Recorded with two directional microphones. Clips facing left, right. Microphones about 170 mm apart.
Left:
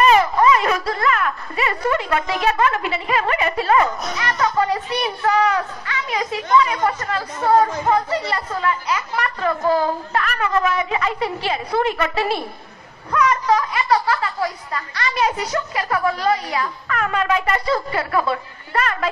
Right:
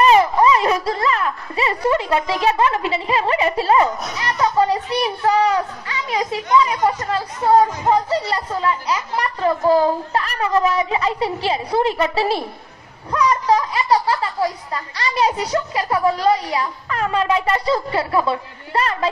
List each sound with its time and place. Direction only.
0.1 s a sound: 25° right (ahead or behind)
5.2 s a child's voice: 30° right (ahead or behind)
13.6 s speech: 30° right (ahead or behind)